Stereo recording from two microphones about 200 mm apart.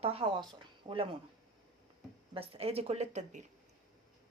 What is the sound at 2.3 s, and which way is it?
Speech, 30° right (ahead or behind).